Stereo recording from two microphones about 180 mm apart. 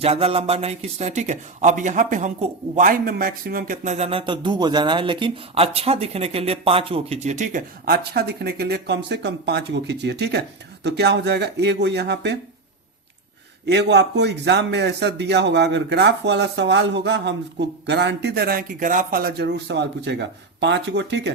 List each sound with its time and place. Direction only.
0.0 s a man's voice: 35° right (ahead or behind); by 12.4 s 70° right (ahead or behind)
13.7 s speech: 75° right (ahead or behind)